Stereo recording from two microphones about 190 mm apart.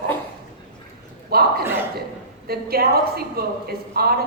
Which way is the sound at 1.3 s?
55° right (ahead or behind).